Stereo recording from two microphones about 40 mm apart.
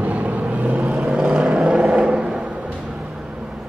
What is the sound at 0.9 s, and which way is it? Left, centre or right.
Vehicle, right.